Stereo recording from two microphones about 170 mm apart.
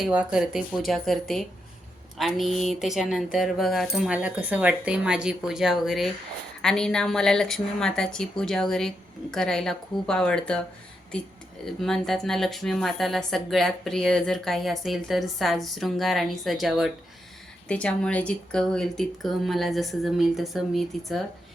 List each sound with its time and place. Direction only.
0.0 s a woman's voice: 5° right (ahead or behind)
11.6 s a woman's voice: centre (ahead or behind)